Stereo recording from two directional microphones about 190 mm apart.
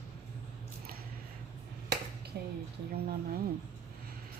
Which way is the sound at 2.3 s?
55° right (ahead or behind).